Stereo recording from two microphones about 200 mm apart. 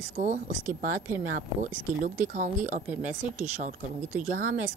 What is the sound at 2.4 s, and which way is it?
Speech, 40° right (ahead or behind).